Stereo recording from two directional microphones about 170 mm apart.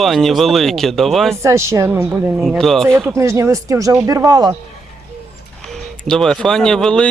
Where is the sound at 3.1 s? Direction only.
20° right (ahead or behind).